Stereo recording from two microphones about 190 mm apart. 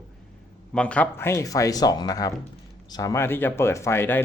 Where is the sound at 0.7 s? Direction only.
5° left (ahead or behind).